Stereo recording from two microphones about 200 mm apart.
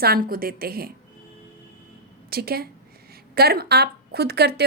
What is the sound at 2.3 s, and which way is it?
A woman's voice, 50° right (ahead or behind).